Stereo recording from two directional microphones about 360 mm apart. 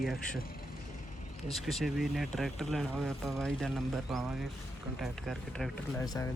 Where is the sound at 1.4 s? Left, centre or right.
Centre.